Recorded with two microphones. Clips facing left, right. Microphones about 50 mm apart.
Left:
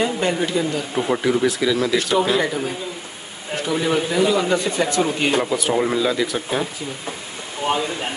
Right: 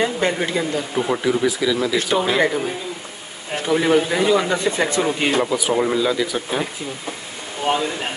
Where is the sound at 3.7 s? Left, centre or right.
Right.